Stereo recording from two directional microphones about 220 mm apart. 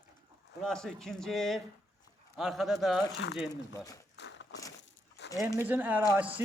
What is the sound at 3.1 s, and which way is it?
Speech, 50° left (ahead or behind).